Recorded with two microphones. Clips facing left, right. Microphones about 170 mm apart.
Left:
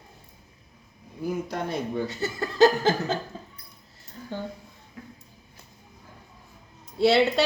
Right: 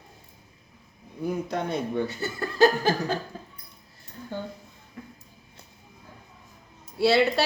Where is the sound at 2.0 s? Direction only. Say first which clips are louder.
Left 1 dB; 20° left (ahead or behind).